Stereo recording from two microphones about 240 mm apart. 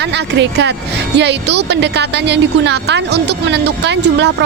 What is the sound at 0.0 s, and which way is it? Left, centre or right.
A woman's voice, right.